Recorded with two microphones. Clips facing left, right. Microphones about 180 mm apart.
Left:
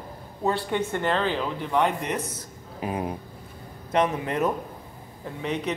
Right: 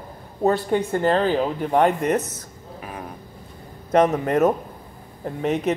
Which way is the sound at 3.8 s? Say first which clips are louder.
Right 6 dB; 40° right (ahead or behind).